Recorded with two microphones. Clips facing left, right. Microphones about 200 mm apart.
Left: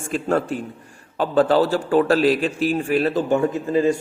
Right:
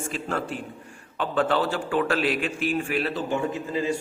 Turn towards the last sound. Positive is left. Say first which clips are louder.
# left 8 dB
turn(degrees=45)  # may be behind; listen again after turning